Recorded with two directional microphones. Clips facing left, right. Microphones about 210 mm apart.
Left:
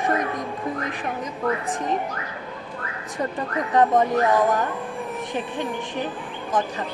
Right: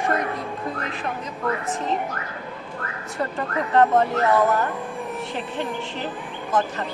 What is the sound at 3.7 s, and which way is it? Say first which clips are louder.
Speech: even; 15° left (ahead or behind).